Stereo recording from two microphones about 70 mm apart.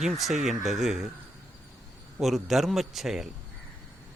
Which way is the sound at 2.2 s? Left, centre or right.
Centre.